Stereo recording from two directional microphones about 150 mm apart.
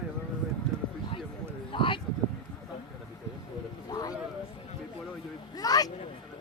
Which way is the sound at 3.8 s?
25° left (ahead or behind).